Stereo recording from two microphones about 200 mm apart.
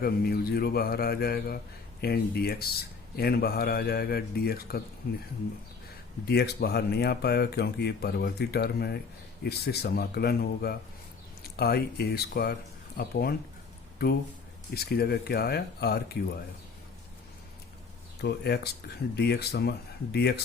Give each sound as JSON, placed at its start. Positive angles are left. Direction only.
{"t": 0.0, "sound": "speech", "side_deg": 50}
{"t": 6.2, "sound": "speech", "side_deg": 55}
{"t": 18.2, "sound": "speech", "side_deg": 55}